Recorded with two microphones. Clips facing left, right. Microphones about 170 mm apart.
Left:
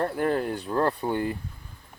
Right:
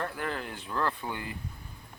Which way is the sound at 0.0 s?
40° left (ahead or behind).